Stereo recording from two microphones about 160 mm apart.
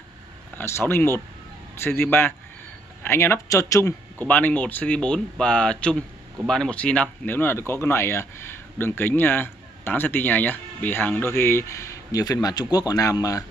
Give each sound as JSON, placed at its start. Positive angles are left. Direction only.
{"t": 0.6, "sound": "a man's voice", "side_deg": 15}